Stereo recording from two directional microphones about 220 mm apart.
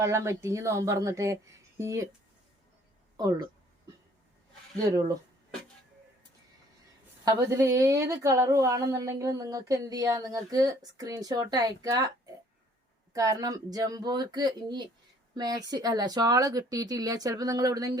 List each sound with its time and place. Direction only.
0.0 s a woman's voice: 15° right (ahead or behind)
3.2 s a woman's voice: 20° right (ahead or behind)
4.9 s a woman's voice: 15° right (ahead or behind)
7.3 s a woman's voice: 15° right (ahead or behind)